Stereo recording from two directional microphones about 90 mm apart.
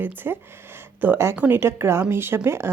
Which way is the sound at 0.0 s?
20° right (ahead or behind).